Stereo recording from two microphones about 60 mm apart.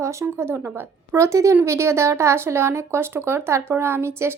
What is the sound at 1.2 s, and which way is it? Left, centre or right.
Speech, right.